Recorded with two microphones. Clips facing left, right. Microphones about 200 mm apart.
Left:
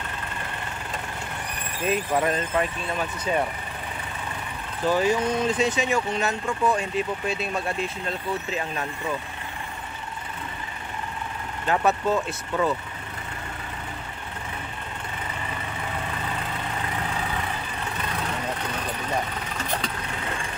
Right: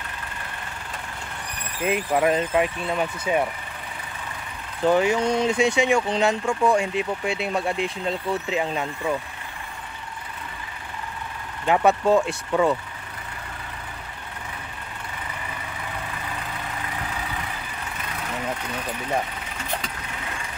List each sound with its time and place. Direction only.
1.8 s speech: 15° right (ahead or behind)
4.9 s speech: 15° right (ahead or behind)
11.6 s speech: 15° right (ahead or behind)